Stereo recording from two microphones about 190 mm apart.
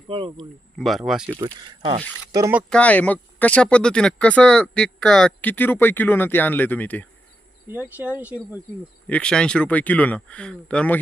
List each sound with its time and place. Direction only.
0.1 s speech: 30° right (ahead or behind)
0.3 s speech: centre (ahead or behind)
1.4 s speech: 25° right (ahead or behind)
2.3 s speech: 15° right (ahead or behind)
2.6 s speech: 5° left (ahead or behind)
7.7 s speech: 10° right (ahead or behind)
9.0 s speech: 5° left (ahead or behind)